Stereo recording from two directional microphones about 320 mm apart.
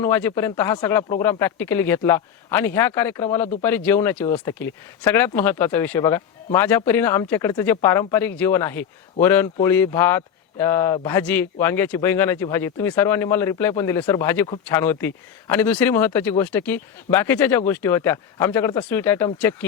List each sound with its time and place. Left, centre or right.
0.0 s speech: centre